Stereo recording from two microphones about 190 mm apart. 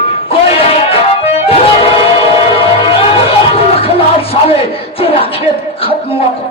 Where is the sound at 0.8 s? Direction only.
30° left (ahead or behind).